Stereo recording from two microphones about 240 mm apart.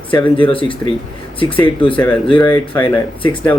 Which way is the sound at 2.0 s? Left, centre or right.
Centre.